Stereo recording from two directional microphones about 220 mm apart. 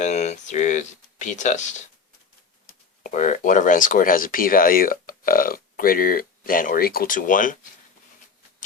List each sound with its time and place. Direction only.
0.0 s speech: 30° left (ahead or behind)
3.0 s speech: 35° left (ahead or behind)